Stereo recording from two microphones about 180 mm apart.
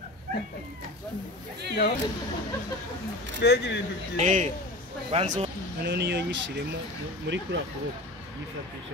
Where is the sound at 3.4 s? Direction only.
65° left (ahead or behind).